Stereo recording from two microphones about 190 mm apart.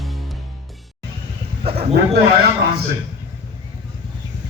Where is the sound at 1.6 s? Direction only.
30° right (ahead or behind).